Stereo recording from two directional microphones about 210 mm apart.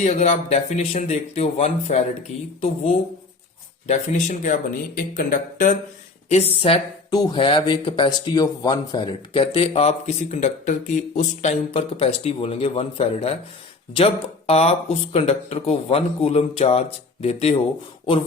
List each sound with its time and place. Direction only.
0.0 s speech: 30° left (ahead or behind)